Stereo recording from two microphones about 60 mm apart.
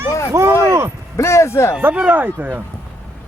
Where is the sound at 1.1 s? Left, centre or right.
Left.